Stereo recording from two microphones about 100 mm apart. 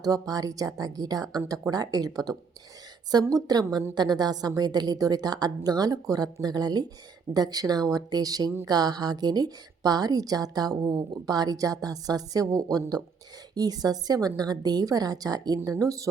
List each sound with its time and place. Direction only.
0.0 s a woman's voice: 40° right (ahead or behind)